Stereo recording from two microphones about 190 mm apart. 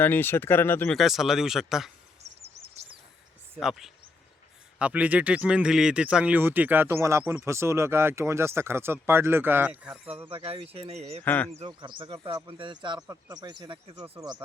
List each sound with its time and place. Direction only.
0.0 s speech: 10° left (ahead or behind)
0.9 s speech: centre (ahead or behind)
2.2 s bird vocalization: 35° right (ahead or behind)
3.5 s speech: centre (ahead or behind)
10.2 s speech: 30° right (ahead or behind)
11.2 s speech: 10° left (ahead or behind)
11.6 s speech: 25° right (ahead or behind)